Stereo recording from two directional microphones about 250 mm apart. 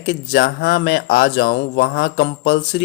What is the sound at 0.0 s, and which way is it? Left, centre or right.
Speech, left.